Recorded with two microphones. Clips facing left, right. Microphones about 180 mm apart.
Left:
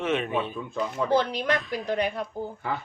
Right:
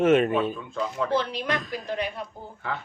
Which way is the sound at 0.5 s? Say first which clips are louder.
Even; 10° left (ahead or behind).